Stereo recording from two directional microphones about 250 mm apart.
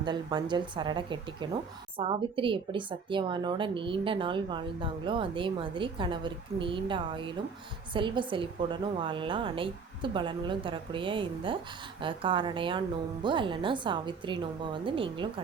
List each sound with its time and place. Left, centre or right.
0.0 s a woman's voice: centre